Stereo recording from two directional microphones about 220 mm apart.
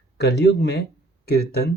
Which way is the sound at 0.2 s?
50° left (ahead or behind).